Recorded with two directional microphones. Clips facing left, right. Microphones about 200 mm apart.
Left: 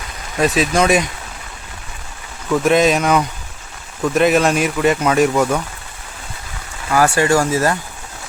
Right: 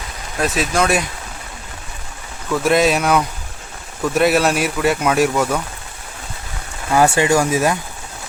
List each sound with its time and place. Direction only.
0.3 s speech: centre (ahead or behind)
2.6 s speech: 5° right (ahead or behind)
6.9 s speech: 20° right (ahead or behind)